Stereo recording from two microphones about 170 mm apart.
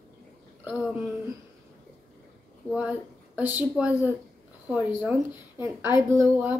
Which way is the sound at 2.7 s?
5° right (ahead or behind).